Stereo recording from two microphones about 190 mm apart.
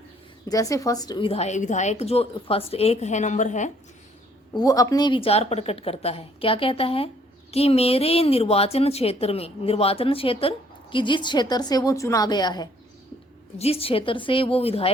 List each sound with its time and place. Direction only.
0.4 s a woman's voice: 20° left (ahead or behind); by 3.7 s 40° left (ahead or behind)
4.5 s a woman's voice: 20° left (ahead or behind)